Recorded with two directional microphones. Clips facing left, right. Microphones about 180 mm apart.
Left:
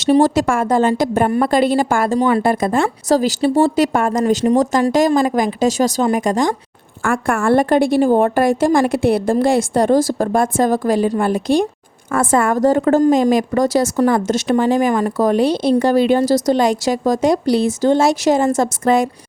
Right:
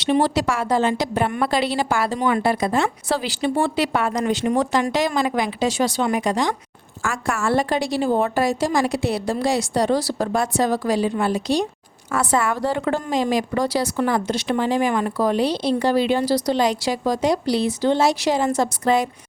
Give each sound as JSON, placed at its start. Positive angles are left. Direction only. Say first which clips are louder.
{"t": 0.0, "sound": "a woman's voice", "louder": "left 6 dB", "side_deg": 45}